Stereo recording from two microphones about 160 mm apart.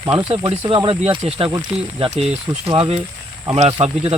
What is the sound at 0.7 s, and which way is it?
Speech, 35° right (ahead or behind).